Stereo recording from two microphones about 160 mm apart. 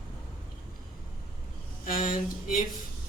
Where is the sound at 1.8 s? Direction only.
55° left (ahead or behind).